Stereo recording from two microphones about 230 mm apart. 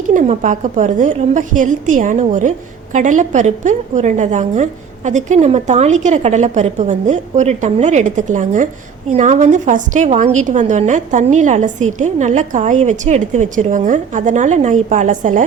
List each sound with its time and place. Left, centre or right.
0.1 s a woman's voice: right